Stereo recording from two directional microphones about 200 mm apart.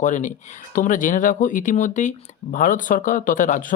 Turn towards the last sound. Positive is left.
turn(degrees=40)  # may be behind; listen again after turning